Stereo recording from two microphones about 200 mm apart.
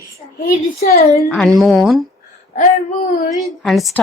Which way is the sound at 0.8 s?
50° left (ahead or behind).